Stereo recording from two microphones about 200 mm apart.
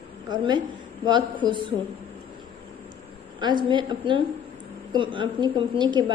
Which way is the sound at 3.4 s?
25° right (ahead or behind).